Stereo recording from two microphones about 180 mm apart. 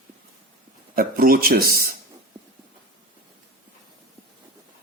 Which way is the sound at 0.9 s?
55° right (ahead or behind).